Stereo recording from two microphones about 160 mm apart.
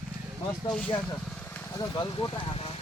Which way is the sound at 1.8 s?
30° left (ahead or behind).